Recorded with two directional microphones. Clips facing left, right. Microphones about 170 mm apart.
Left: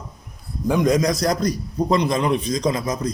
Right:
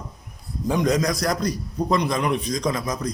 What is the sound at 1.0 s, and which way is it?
A man's voice, 25° left (ahead or behind).